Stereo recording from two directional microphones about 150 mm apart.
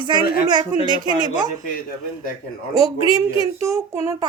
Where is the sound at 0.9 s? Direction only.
35° left (ahead or behind).